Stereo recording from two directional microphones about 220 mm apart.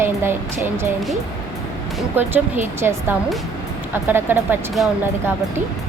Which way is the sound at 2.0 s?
10° right (ahead or behind).